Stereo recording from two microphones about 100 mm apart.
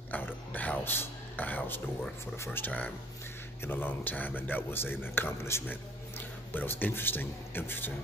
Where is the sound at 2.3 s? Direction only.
25° left (ahead or behind).